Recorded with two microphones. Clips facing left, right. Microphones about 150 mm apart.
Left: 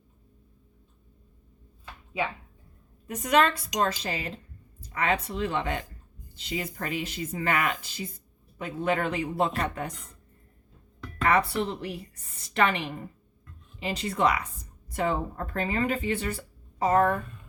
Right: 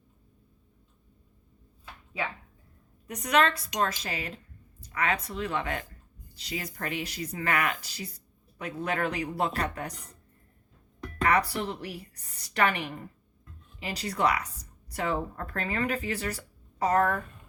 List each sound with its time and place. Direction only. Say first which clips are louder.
3.2 s speech: left 2 dB; 30° left (ahead or behind)
11.3 s speech: left 2 dB; 25° left (ahead or behind)